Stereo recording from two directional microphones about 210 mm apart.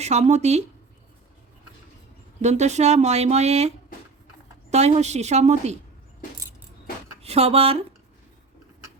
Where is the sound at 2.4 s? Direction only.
35° right (ahead or behind).